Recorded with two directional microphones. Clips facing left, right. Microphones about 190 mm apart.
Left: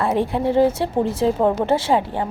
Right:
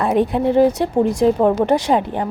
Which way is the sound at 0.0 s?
20° right (ahead or behind).